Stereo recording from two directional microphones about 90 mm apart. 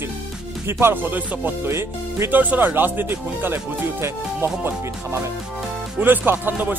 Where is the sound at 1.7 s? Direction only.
30° right (ahead or behind).